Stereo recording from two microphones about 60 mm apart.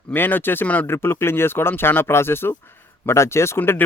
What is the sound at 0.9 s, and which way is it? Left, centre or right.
Speech, left.